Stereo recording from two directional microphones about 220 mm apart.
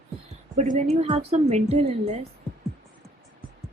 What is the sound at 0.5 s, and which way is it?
A woman's voice, 30° right (ahead or behind).